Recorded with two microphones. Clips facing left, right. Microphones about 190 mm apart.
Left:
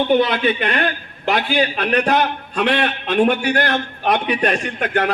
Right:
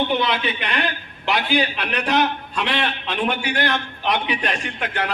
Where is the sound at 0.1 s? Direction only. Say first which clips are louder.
Left 6 dB; 45° left (ahead or behind).